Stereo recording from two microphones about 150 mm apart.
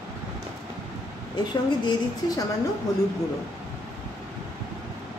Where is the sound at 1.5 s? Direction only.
25° left (ahead or behind).